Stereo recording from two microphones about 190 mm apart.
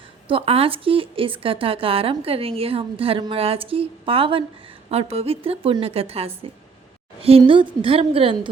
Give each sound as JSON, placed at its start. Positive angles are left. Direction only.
{"t": 0.3, "sound": "a woman's voice", "side_deg": -30}